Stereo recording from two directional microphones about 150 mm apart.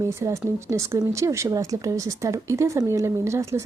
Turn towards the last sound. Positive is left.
turn(degrees=-20)  # may be behind; listen again after turning